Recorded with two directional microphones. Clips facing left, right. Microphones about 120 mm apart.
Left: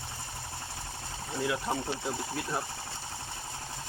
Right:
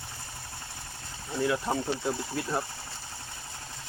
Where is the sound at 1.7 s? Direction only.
5° right (ahead or behind).